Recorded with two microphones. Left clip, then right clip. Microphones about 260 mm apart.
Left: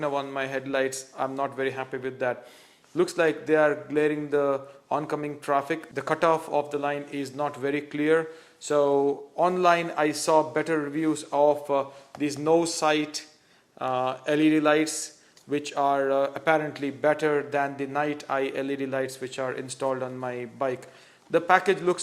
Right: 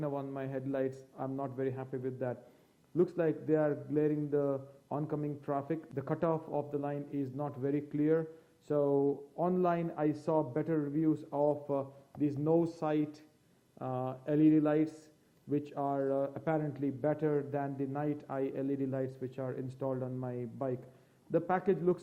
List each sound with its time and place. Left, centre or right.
0.0 s a man's voice: centre
8.8 s speech: left
9.4 s a man's voice: centre